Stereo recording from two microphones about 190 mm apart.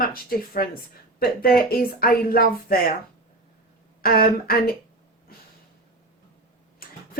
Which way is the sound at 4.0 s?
50° left (ahead or behind).